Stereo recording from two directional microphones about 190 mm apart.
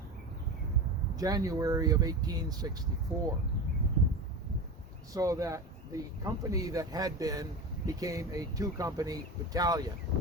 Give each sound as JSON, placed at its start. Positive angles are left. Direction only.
{"t": 1.1, "sound": "speech", "side_deg": -20}
{"t": 5.1, "sound": "speech", "side_deg": -20}